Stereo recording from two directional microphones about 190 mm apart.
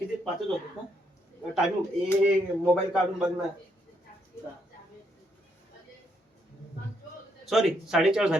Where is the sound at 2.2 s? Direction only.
5° right (ahead or behind).